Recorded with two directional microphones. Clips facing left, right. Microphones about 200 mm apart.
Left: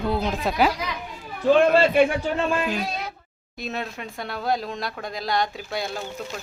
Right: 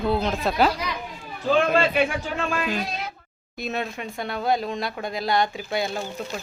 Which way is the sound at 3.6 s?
Centre (ahead or behind).